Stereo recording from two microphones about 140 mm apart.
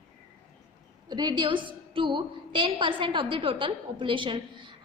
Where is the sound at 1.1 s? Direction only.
30° right (ahead or behind).